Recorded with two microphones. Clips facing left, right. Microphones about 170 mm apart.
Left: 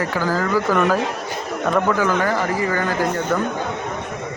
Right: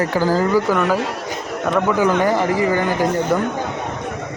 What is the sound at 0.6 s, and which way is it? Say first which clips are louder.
Speech: even; 5° right (ahead or behind).